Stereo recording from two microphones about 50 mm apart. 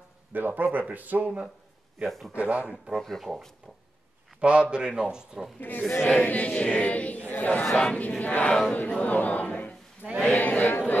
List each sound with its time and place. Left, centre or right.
0.3 s speech: right
2.0 s a man's voice: centre
2.3 s a man's voice: right
3.0 s speech: centre
4.4 s a man's voice: right
5.6 s chant: left
9.0 s chatter: left
10.1 s chant: left